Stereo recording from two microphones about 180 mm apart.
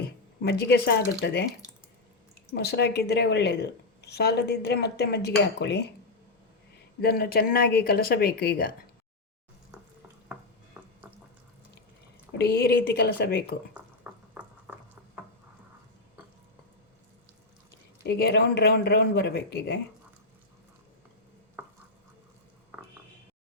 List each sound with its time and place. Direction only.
0.4 s a woman's voice: 65° left (ahead or behind)
2.5 s a woman's voice: 65° left (ahead or behind)
7.0 s a woman's voice: 60° left (ahead or behind)
12.4 s a woman's voice: 65° left (ahead or behind)
14.0 s boiling: 5° right (ahead or behind)
18.0 s a woman's voice: 65° left (ahead or behind)